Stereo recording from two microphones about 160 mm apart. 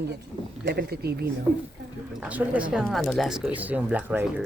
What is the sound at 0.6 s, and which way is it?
Speech, 90° right.